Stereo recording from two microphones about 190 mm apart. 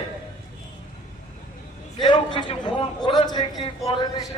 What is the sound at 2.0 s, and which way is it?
A man's voice, 25° left (ahead or behind).